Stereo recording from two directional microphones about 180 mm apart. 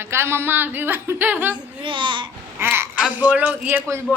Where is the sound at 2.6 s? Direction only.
15° right (ahead or behind).